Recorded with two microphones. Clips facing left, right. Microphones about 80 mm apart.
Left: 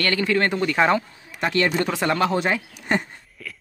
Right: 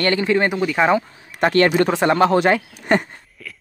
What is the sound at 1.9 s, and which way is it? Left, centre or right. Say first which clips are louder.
Speech: right 6 dB; right.